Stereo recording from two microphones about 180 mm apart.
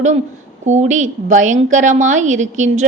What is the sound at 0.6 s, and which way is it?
A woman's voice, 40° right (ahead or behind).